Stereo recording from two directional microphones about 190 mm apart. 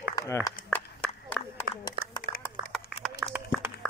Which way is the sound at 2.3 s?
30° right (ahead or behind).